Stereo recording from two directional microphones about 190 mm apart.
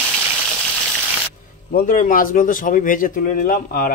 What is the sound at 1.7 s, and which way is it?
Speech, 50° left (ahead or behind).